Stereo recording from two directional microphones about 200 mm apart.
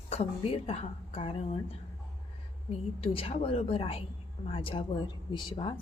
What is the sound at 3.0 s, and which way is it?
A woman's voice, 30° left (ahead or behind).